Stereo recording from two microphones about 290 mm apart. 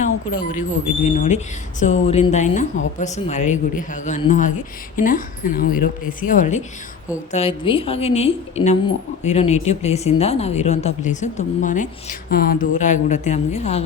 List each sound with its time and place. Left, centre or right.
0.0 s speech: left